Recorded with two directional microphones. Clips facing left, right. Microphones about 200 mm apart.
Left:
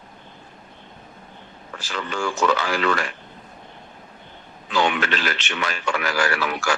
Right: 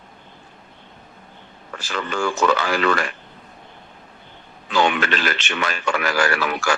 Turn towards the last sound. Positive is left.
turn(degrees=-55)  # may be behind; listen again after turning